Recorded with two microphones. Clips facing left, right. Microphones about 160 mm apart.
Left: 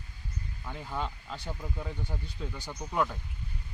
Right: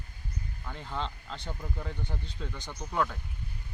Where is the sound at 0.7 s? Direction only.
10° left (ahead or behind).